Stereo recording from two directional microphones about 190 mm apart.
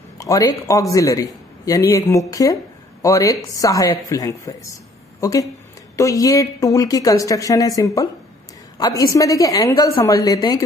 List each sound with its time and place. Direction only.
0.2 s a man's voice: 20° left (ahead or behind)